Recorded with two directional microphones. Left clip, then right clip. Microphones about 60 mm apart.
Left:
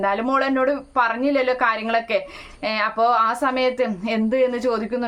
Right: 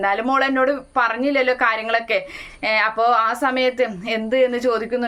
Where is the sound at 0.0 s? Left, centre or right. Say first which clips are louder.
Right 2 dB; left.